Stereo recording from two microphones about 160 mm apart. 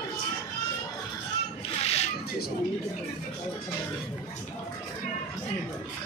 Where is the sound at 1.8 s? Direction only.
40° left (ahead or behind).